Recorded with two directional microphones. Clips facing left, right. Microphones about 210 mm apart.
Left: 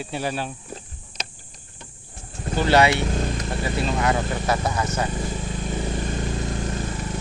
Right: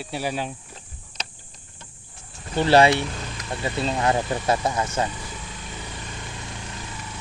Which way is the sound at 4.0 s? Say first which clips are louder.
Even; 25° right (ahead or behind).